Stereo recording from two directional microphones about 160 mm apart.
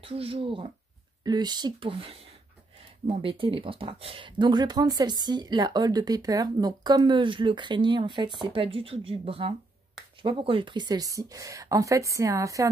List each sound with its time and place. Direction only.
0.0 s speech: 35° right (ahead or behind); by 12.6 s 20° right (ahead or behind)